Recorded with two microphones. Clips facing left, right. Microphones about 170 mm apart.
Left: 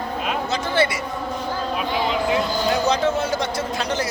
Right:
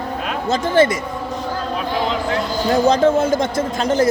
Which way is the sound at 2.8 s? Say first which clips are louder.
Right 6 dB; 50° right (ahead or behind).